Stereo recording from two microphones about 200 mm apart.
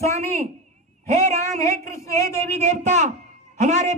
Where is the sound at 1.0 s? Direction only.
35° right (ahead or behind).